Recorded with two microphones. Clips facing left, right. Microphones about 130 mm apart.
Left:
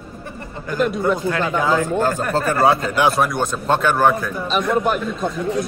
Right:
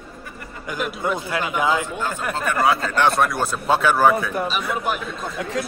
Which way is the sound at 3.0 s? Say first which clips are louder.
Left 1 dB; centre (ahead or behind).